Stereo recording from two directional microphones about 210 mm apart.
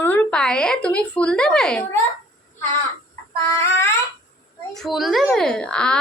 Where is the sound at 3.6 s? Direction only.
15° left (ahead or behind).